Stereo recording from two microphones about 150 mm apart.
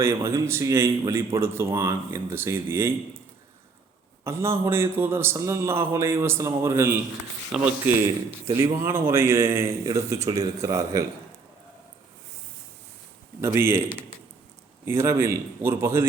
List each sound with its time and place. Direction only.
0.0 s a man's voice: 15° right (ahead or behind)
4.2 s a man's voice: 20° right (ahead or behind)
7.5 s speech: 5° right (ahead or behind)
8.4 s a man's voice: 20° right (ahead or behind)
13.4 s a man's voice: 15° right (ahead or behind)